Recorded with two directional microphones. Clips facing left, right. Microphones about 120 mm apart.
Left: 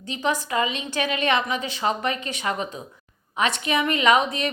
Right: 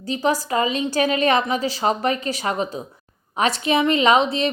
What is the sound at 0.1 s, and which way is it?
A woman's voice, 35° right (ahead or behind).